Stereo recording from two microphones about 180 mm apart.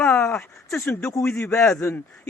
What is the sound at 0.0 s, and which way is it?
A man's voice, 10° left (ahead or behind).